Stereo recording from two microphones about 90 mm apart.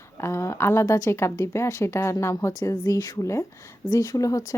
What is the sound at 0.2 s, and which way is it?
A woman's voice, 30° left (ahead or behind).